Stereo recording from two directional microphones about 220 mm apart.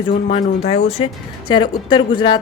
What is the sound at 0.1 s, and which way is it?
Speech, 30° left (ahead or behind).